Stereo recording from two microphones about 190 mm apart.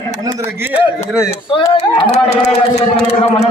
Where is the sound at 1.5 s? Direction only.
25° left (ahead or behind).